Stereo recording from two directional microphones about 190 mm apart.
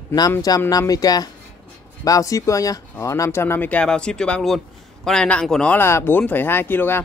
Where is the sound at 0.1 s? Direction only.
20° left (ahead or behind).